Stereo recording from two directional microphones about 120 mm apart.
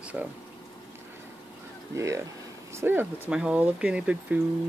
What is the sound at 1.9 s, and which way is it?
Speech, 25° right (ahead or behind).